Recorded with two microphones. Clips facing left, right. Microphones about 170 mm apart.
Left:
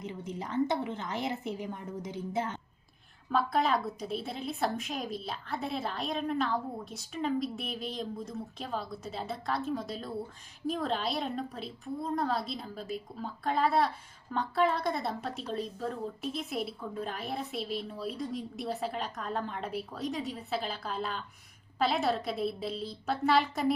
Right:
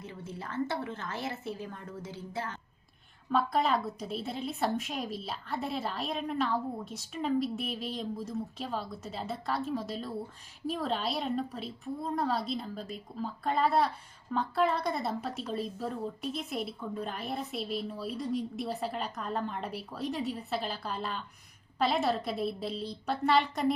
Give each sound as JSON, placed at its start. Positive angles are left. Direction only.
{"t": 0.0, "sound": "a woman's voice", "side_deg": 15}
{"t": 3.2, "sound": "a woman's voice", "side_deg": 0}